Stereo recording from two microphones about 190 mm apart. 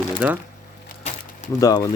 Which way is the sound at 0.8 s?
35° left (ahead or behind).